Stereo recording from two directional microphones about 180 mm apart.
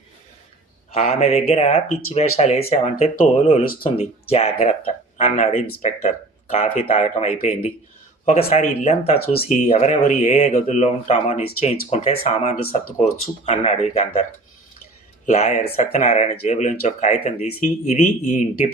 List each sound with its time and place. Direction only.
0.9 s speech: 35° left (ahead or behind)
3.6 s speech: 55° left (ahead or behind)
3.8 s speech: 35° left (ahead or behind)
9.2 s speech: 60° left (ahead or behind)
9.5 s speech: 35° left (ahead or behind)
15.3 s speech: 40° left (ahead or behind)